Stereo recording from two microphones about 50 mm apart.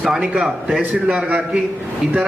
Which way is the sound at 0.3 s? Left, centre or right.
Centre.